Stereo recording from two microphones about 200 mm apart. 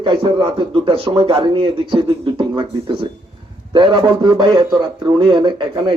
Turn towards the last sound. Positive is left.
turn(degrees=-25)  # may be behind; listen again after turning